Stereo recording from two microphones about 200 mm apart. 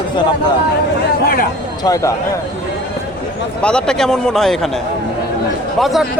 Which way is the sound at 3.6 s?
5° left (ahead or behind).